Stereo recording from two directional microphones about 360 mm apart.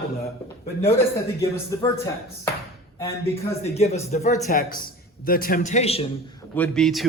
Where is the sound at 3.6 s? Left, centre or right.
Centre.